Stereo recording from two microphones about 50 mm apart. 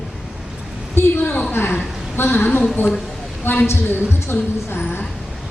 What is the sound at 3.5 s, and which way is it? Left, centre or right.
A woman's voice, left.